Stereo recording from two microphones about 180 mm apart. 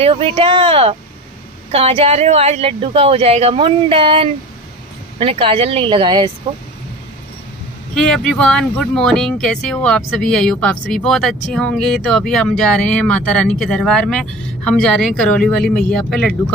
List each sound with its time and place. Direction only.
0.0 s speech: 30° right (ahead or behind)
7.9 s speech: 5° left (ahead or behind)